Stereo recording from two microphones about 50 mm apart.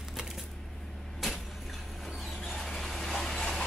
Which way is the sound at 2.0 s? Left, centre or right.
Centre.